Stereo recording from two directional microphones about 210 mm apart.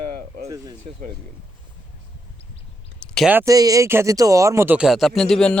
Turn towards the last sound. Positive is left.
turn(degrees=5)  # may be behind; listen again after turning